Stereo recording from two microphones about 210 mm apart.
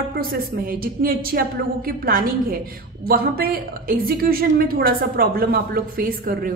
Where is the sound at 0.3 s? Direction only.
45° right (ahead or behind).